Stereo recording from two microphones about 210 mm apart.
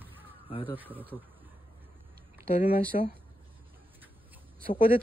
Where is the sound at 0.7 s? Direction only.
10° right (ahead or behind).